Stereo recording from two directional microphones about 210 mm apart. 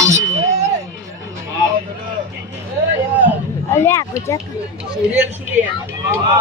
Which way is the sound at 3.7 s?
10° left (ahead or behind).